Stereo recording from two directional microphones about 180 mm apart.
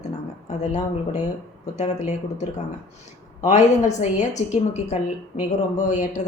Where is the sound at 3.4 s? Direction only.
40° left (ahead or behind).